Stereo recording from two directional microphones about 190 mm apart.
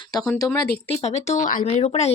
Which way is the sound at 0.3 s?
20° left (ahead or behind).